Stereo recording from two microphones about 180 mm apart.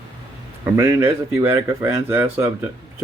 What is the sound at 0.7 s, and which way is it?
Speech, 15° right (ahead or behind).